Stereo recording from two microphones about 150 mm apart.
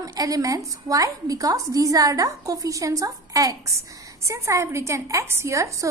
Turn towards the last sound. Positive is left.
turn(degrees=-20)  # may be behind; listen again after turning